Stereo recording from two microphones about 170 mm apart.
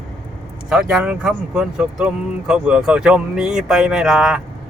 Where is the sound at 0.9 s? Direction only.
5° right (ahead or behind).